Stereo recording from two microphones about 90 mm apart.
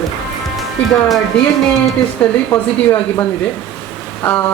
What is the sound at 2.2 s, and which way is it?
Speech, 15° left (ahead or behind).